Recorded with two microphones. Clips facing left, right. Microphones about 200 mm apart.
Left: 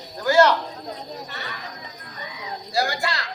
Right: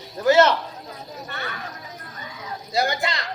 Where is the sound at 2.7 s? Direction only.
20° right (ahead or behind).